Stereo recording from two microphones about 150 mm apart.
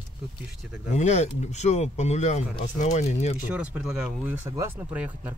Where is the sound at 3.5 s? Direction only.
10° right (ahead or behind).